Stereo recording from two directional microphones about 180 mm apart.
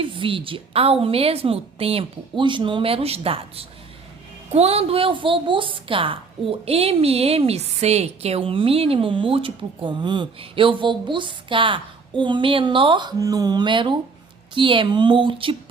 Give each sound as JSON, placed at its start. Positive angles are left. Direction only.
{"t": 0.0, "sound": "a woman's voice", "side_deg": -30}